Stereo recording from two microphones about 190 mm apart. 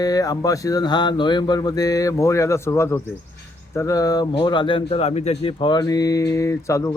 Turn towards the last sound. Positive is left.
turn(degrees=15)  # may be behind; listen again after turning